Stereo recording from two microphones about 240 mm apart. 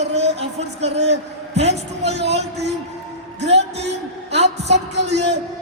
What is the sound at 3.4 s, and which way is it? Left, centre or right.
A woman's voice, right.